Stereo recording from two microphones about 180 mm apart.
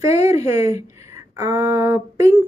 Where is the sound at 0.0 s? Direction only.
15° right (ahead or behind).